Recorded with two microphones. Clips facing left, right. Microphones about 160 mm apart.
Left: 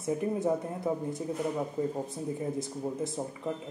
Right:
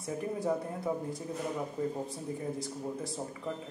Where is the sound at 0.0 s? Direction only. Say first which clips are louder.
Left 5 dB; 20° left (ahead or behind).